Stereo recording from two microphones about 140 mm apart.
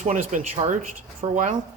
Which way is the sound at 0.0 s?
60° right (ahead or behind).